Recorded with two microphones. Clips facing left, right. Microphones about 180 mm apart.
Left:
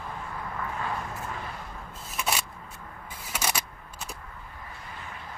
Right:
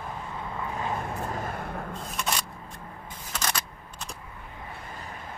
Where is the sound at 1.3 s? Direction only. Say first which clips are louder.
Right 5 dB; 45° right (ahead or behind).